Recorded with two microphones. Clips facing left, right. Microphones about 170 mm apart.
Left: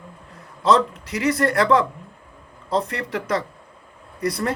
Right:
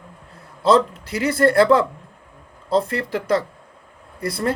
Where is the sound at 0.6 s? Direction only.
30° right (ahead or behind).